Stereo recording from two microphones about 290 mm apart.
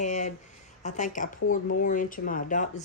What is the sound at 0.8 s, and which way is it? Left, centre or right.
Speech, left.